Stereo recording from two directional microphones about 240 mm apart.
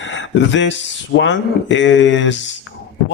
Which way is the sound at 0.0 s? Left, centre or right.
Left.